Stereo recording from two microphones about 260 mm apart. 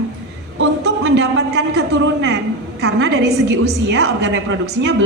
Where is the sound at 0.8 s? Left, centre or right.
Right.